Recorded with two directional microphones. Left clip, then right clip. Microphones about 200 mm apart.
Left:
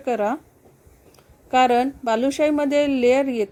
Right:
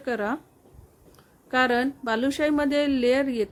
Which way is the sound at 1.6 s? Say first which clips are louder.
Left 5 dB; centre (ahead or behind).